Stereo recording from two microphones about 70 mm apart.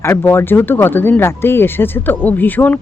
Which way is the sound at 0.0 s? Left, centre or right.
Left.